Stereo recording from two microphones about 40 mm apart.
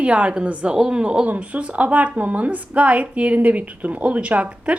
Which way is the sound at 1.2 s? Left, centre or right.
Right.